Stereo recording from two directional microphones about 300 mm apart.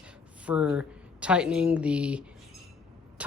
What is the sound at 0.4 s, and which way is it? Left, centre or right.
Speech, centre.